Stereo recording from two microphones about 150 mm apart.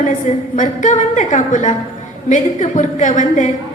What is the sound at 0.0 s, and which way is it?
A woman's voice, 55° left (ahead or behind).